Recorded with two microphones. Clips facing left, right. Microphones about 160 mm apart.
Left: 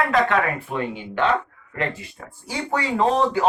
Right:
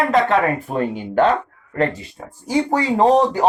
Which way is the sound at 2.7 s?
40° right (ahead or behind).